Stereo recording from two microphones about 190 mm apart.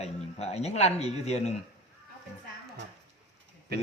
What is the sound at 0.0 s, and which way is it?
A man's voice, 35° left (ahead or behind).